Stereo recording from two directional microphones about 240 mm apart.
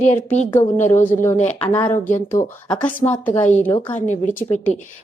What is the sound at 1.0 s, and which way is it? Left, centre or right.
A woman's voice, centre.